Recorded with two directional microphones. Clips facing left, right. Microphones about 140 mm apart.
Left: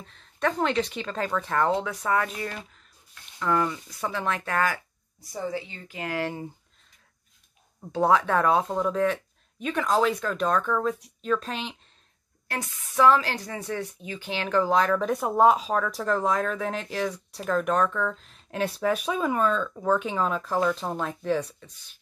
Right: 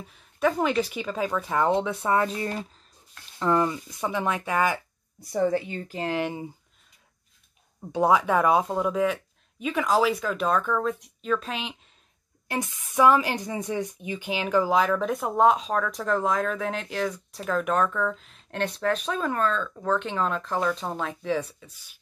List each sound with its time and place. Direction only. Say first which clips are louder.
0.0 s speech: right 3 dB; 10° right (ahead or behind)
5.2 s a woman's voice: right 7 dB; 60° right (ahead or behind)
5.8 s speech: right 6 dB; 40° right (ahead or behind)
6.0 s speech: right 1 dB; 20° right (ahead or behind)
7.9 s speech: right 1 dB; 10° right (ahead or behind)
12.4 s speech: right 4 dB; 15° right (ahead or behind)